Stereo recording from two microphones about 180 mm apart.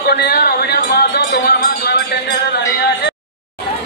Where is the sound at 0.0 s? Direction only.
60° left (ahead or behind).